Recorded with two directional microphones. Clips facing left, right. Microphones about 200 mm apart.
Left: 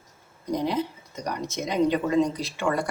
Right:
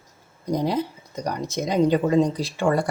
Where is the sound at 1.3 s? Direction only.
35° right (ahead or behind).